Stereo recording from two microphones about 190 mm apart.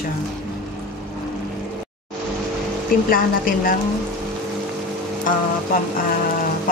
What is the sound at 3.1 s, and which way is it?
Speech, 50° left (ahead or behind).